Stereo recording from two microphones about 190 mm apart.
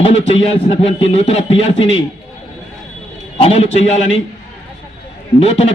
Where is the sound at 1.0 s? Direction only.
35° left (ahead or behind).